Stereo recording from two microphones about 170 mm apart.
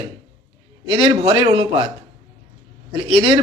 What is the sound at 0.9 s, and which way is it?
A man's voice, 25° right (ahead or behind).